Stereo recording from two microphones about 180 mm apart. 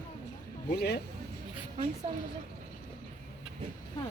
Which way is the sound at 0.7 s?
65° left (ahead or behind).